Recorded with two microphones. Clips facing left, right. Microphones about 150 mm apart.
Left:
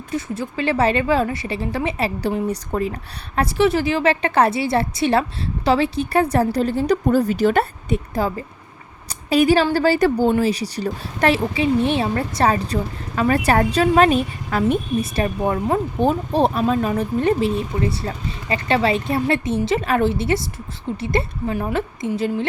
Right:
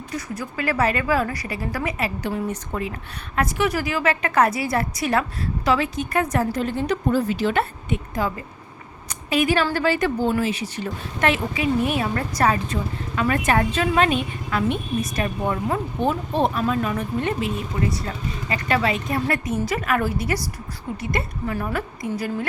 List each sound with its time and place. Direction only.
0.1 s a woman's voice: 25° left (ahead or behind)